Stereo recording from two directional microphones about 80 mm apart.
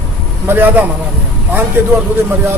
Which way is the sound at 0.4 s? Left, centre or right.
Right.